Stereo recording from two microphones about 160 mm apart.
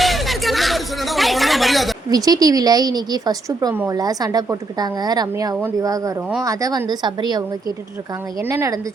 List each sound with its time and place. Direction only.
0.0 s a sound: centre (ahead or behind)
2.0 s a woman's voice: 25° right (ahead or behind)
8.4 s a woman's voice: 15° right (ahead or behind)